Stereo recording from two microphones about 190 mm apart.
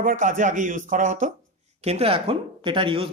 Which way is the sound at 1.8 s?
30° right (ahead or behind).